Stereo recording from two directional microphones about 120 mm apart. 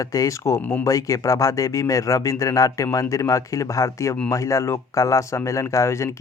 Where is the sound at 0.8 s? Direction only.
30° left (ahead or behind).